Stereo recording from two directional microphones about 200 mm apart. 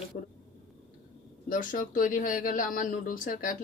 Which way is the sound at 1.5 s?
40° left (ahead or behind).